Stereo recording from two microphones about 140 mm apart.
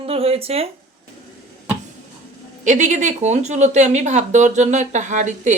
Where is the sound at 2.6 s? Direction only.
60° right (ahead or behind).